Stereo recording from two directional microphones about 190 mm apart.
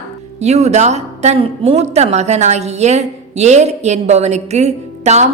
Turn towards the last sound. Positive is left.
turn(degrees=-35)  # may be behind; listen again after turning